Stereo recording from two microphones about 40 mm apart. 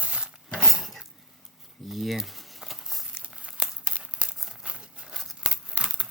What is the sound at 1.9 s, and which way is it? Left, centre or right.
Speech, centre.